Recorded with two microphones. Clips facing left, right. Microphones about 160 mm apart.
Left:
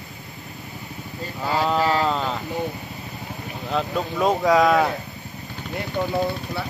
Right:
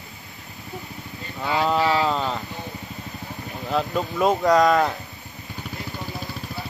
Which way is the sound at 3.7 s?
Centre (ahead or behind).